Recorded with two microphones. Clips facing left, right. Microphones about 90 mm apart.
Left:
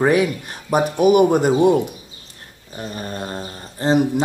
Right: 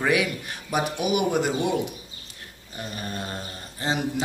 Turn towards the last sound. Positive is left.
turn(degrees=40)  # may be behind; listen again after turning